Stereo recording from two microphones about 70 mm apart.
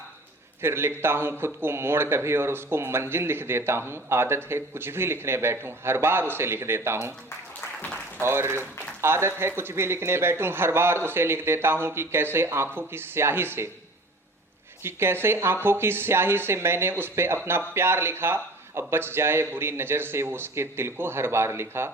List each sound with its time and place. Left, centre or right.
0.6 s speech: right
8.2 s speech: right
14.8 s speech: right